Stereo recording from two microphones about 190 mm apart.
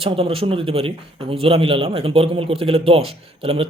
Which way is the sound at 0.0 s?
30° right (ahead or behind).